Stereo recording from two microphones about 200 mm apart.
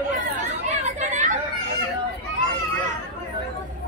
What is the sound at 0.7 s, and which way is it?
Chatter, 35° right (ahead or behind).